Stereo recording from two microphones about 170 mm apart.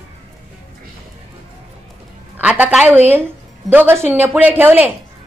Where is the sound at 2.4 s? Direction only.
10° right (ahead or behind).